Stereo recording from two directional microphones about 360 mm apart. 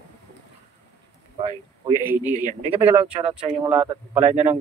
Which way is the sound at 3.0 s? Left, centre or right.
Centre.